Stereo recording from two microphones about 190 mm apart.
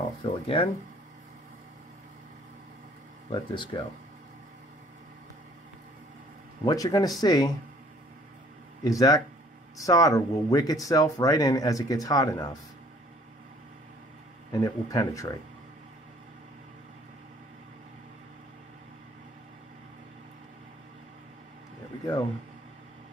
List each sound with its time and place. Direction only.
0.2 s speech: 30° left (ahead or behind)
3.3 s speech: 25° left (ahead or behind)
6.6 s speech: 20° left (ahead or behind)
8.8 s speech: 20° left (ahead or behind)
14.5 s speech: 20° left (ahead or behind)